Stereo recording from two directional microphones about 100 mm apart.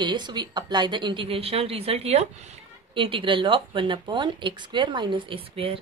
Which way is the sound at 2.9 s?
60° right (ahead or behind).